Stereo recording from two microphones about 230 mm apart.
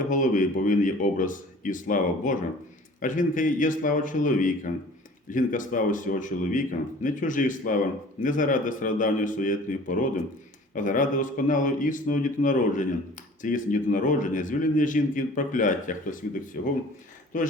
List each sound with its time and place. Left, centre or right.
0.0 s speech: left